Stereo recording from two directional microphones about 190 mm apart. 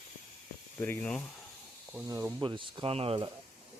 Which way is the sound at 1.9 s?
15° right (ahead or behind).